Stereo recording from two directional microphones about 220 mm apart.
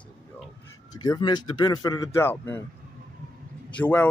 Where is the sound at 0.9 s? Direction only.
15° left (ahead or behind).